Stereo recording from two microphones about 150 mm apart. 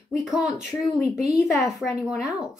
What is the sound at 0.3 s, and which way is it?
A woman's voice, 5° right (ahead or behind).